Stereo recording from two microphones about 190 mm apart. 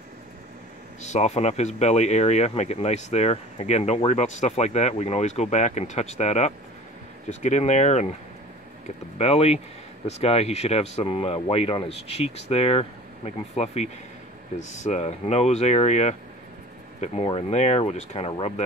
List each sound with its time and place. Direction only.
1.0 s speech: 35° left (ahead or behind)
9.2 s speech: 35° left (ahead or behind)